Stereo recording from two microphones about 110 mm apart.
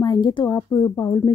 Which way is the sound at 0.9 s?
30° left (ahead or behind).